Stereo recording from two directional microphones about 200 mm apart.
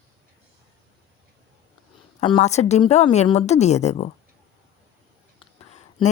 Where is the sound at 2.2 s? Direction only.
25° left (ahead or behind).